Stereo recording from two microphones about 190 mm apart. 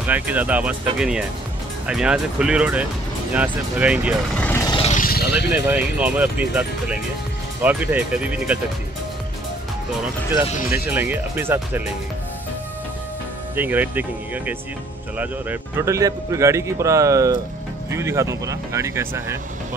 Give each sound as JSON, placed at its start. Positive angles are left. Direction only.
{"t": 0.0, "sound": "speech", "side_deg": -10}
{"t": 4.4, "sound": "vehicle", "side_deg": 10}
{"t": 4.8, "sound": "vehicle", "side_deg": 45}
{"t": 5.7, "sound": "speech", "side_deg": -5}
{"t": 10.3, "sound": "speech", "side_deg": -10}
{"t": 13.6, "sound": "speech", "side_deg": -10}